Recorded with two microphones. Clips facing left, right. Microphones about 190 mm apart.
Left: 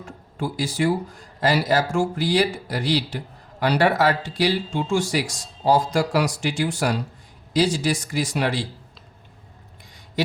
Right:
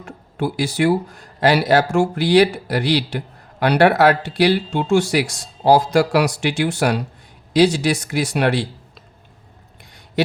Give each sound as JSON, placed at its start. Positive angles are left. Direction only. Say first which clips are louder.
{"t": 0.0, "sound": "speech", "louder": "right 5 dB", "side_deg": -65}
{"t": 10.2, "sound": "a man's voice", "louder": "right 5 dB", "side_deg": -65}